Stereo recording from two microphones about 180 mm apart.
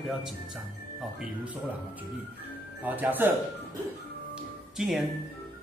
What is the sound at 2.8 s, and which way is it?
Speech, 10° right (ahead or behind).